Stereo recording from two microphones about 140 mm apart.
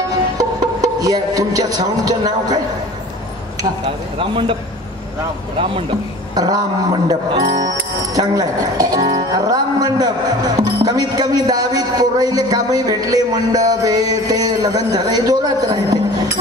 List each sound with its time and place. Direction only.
0.4 s speech: 25° right (ahead or behind)
3.8 s speech: 40° right (ahead or behind)
6.3 s a sound: 30° right (ahead or behind)
7.1 s a man's voice: 25° right (ahead or behind)